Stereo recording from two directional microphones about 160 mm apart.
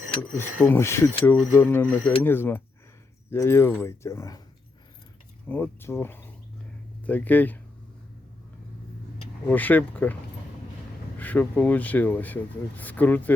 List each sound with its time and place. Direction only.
0.6 s speech: 15° left (ahead or behind)
5.5 s speech: 15° left (ahead or behind)
9.5 s speech: 10° left (ahead or behind)
11.2 s speech: 10° left (ahead or behind)